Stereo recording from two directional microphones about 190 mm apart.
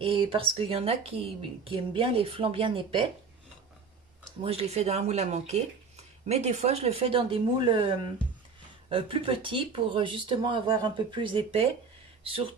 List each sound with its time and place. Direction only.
0.0 s speech: 25° right (ahead or behind)
4.4 s speech: 30° right (ahead or behind)